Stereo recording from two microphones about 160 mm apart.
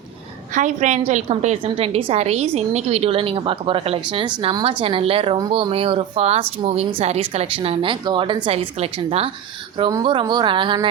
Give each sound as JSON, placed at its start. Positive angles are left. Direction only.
{"t": 0.5, "sound": "a woman's voice", "side_deg": -50}